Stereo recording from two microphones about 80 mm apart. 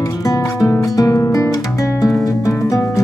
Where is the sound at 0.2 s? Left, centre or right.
Left.